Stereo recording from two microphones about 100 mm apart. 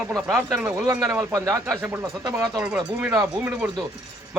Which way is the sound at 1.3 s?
35° right (ahead or behind).